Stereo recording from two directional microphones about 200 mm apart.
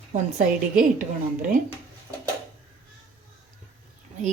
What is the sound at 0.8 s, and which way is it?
Speech, 45° right (ahead or behind).